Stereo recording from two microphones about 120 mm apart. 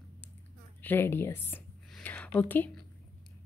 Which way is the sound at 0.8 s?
20° left (ahead or behind).